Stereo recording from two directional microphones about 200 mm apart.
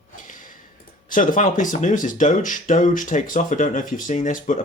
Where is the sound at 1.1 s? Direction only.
40° left (ahead or behind).